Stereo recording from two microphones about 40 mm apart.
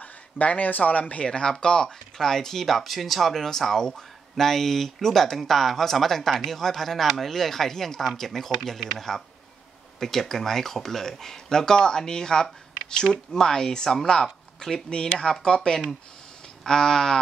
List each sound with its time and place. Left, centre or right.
0.0 s speech: left; by 17.2 s centre